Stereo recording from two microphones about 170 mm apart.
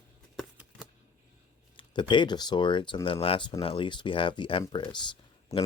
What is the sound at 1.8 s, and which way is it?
Speech, 30° left (ahead or behind).